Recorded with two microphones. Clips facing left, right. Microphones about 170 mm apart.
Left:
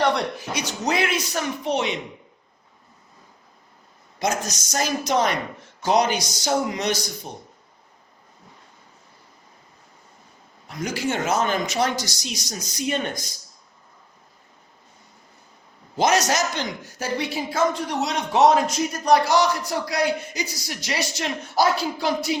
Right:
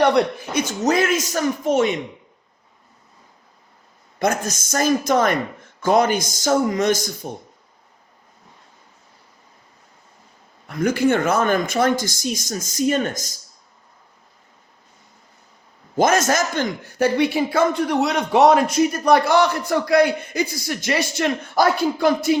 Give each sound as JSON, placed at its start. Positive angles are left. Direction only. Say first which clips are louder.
{"t": 0.0, "sound": "speech", "louder": "right 5 dB", "side_deg": -55}
{"t": 4.2, "sound": "speech", "louder": "right 4 dB", "side_deg": -55}
{"t": 10.7, "sound": "speech", "louder": "right 8 dB", "side_deg": -55}
{"t": 16.0, "sound": "a man's voice", "louder": "right 3 dB", "side_deg": -50}